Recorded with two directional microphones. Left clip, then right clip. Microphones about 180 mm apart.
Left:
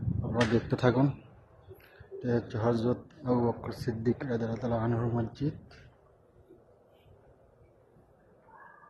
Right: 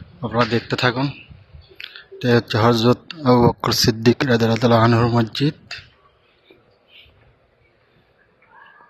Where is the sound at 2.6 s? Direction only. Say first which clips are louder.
Right 13 dB; 30° right (ahead or behind).